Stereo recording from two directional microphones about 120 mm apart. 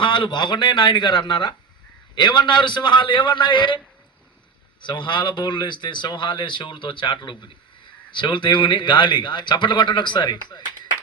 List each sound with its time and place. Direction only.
0.0 s a man's voice: 40° left (ahead or behind)
4.8 s a man's voice: 40° left (ahead or behind)